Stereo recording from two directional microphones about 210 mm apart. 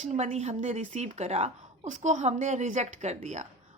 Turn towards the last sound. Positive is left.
turn(degrees=-35)  # may be behind; listen again after turning